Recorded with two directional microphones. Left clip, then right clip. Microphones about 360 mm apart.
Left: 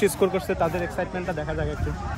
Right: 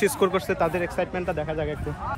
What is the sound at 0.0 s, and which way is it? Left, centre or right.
Speech, centre.